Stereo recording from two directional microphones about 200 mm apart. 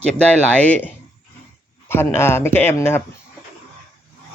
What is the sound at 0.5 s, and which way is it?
Speech, 10° left (ahead or behind).